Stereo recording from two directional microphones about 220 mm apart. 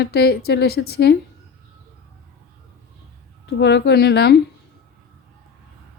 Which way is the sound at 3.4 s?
50° left (ahead or behind).